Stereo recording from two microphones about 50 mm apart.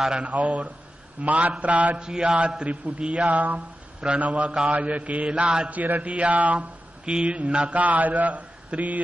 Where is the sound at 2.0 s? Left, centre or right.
Centre.